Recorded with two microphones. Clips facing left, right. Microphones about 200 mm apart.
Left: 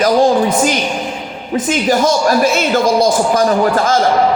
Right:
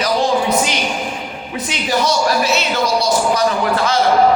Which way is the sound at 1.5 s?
45° left (ahead or behind).